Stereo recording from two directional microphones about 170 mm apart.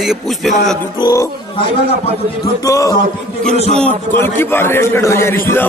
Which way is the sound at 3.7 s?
10° left (ahead or behind).